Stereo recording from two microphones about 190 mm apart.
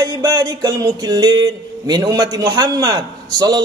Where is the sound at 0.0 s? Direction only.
20° right (ahead or behind).